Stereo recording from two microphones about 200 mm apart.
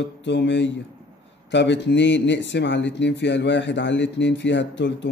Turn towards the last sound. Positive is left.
turn(degrees=65)  # may be behind; listen again after turning